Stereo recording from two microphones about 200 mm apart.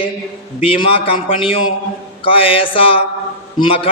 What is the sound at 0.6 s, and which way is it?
A man's voice, 25° left (ahead or behind).